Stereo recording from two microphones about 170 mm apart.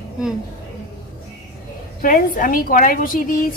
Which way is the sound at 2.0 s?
55° left (ahead or behind).